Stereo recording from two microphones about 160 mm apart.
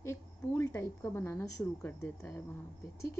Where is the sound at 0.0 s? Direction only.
15° left (ahead or behind).